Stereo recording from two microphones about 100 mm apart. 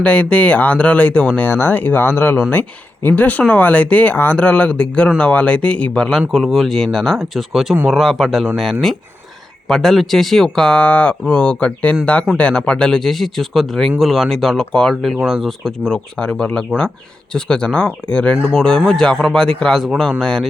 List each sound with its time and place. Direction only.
0.0 s speech: 10° left (ahead or behind)